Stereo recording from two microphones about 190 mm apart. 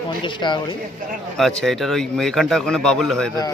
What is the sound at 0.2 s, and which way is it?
Speech, 25° left (ahead or behind).